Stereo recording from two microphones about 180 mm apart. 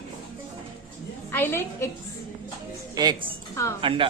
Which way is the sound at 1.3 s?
10° left (ahead or behind).